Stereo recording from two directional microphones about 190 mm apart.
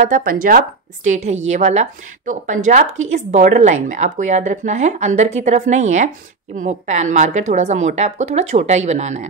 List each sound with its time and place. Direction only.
0.0 s a woman's voice: 45° right (ahead or behind)